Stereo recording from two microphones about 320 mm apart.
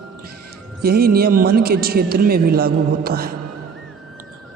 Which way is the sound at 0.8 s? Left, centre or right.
Right.